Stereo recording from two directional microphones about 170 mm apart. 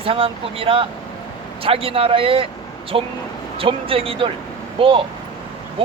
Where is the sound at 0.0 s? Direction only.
35° right (ahead or behind).